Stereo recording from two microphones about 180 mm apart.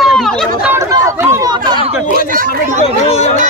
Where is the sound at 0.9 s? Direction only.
15° right (ahead or behind).